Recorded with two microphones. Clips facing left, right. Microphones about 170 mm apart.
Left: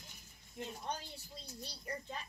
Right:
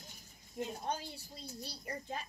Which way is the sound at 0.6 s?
45° right (ahead or behind).